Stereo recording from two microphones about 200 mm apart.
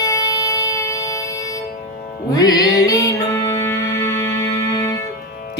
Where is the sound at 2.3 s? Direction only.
20° left (ahead or behind).